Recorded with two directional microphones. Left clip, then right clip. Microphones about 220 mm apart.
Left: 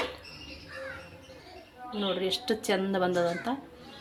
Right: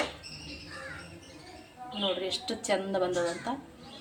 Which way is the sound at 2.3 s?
30° left (ahead or behind).